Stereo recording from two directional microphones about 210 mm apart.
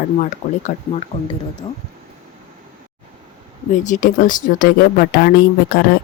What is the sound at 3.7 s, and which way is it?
Speech, 35° left (ahead or behind).